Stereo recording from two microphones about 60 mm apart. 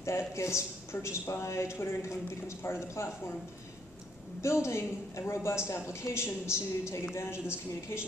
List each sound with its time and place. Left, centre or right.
0.4 s a woman's voice: left
4.4 s a woman's voice: left